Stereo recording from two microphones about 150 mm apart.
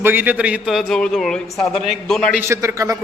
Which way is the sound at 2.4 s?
20° right (ahead or behind).